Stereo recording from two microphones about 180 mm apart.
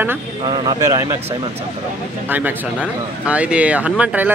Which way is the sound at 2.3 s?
10° right (ahead or behind).